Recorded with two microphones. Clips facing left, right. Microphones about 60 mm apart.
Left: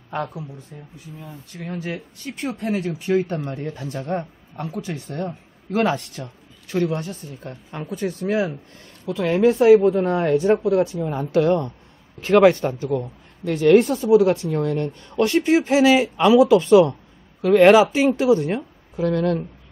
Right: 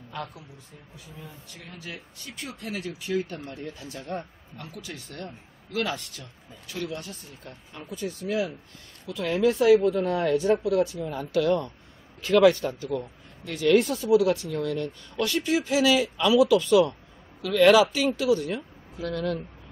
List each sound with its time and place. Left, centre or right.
1.5 s speech: left
2.3 s a man's voice: left
6.2 s speech: left
6.7 s a man's voice: left